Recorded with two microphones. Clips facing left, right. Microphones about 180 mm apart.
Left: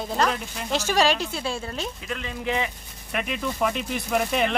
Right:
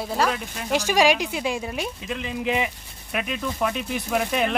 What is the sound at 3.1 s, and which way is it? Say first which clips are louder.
Speech: even; centre (ahead or behind).